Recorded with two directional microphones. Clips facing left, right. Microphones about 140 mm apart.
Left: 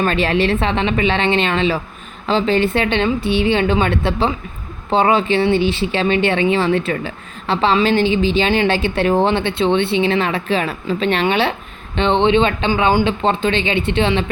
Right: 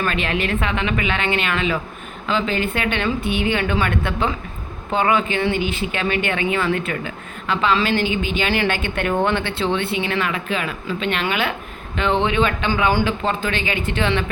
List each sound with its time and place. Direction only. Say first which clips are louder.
0.0 s a woman's voice: left 6 dB; 35° left (ahead or behind)